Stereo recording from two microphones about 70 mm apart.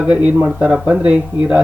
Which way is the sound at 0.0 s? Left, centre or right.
Centre.